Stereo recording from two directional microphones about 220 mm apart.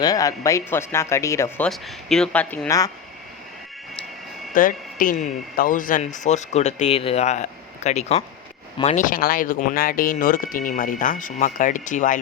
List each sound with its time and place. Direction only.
0.0 s speech: 15° left (ahead or behind)
4.5 s speech: 40° left (ahead or behind)